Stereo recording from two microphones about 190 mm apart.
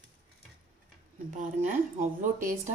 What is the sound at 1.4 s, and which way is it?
A woman's voice, 40° right (ahead or behind).